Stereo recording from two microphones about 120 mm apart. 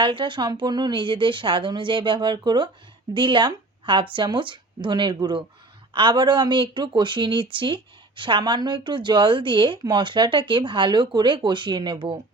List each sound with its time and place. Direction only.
0.0 s speech: 45° right (ahead or behind)